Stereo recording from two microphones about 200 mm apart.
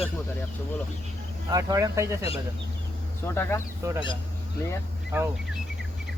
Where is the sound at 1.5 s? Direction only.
20° right (ahead or behind).